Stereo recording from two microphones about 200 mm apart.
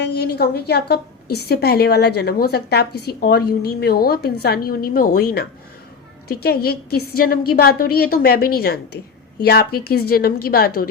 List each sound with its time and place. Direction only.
0.0 s a woman's voice: 55° left (ahead or behind)